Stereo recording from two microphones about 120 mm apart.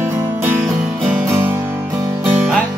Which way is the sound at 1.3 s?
20° right (ahead or behind).